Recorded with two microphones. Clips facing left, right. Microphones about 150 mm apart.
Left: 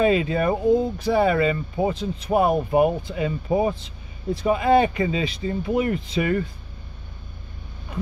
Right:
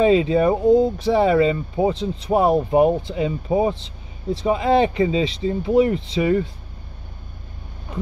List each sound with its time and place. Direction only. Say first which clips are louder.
0.0 s speech: right 4 dB; 25° right (ahead or behind)